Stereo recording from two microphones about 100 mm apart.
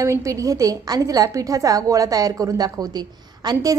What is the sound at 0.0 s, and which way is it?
A woman's voice, 30° right (ahead or behind).